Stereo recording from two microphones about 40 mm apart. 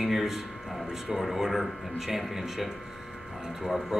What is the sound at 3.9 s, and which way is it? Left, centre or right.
Speech, centre.